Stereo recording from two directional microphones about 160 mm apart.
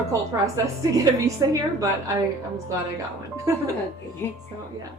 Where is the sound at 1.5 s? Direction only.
20° right (ahead or behind).